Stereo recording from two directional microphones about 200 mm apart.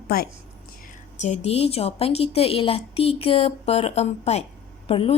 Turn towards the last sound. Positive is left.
turn(degrees=30)  # may be behind; listen again after turning